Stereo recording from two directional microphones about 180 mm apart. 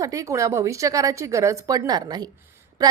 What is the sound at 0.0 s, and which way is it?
A woman's voice, 20° right (ahead or behind).